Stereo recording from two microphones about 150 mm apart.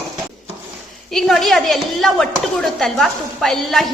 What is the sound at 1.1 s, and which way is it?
Chopping, centre (ahead or behind).